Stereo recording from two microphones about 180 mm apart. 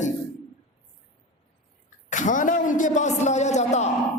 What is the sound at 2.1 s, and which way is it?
A man's voice, 45° left (ahead or behind).